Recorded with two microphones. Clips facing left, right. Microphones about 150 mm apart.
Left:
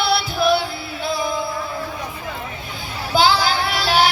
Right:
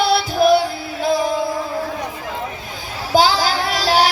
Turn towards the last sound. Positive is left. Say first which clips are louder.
# right 2 dB
turn(degrees=-40)  # may be behind; listen again after turning